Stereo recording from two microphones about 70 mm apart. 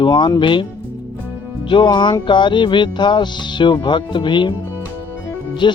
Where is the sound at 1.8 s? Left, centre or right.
Left.